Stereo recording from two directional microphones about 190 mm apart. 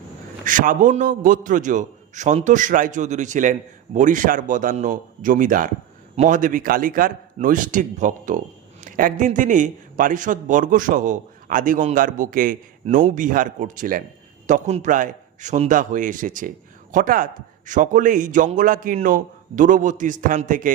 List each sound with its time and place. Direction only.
0.4 s a man's voice: 45° right (ahead or behind)